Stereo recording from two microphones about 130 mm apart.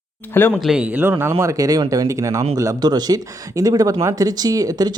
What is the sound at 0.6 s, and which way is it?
A man's voice, 5° right (ahead or behind).